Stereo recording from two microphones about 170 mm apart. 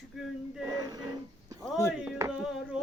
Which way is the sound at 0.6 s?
20° right (ahead or behind).